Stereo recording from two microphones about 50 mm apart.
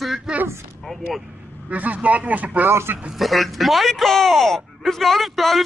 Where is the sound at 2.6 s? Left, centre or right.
Right.